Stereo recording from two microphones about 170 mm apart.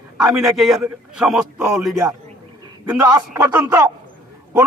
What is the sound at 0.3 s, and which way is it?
A man's voice, centre (ahead or behind).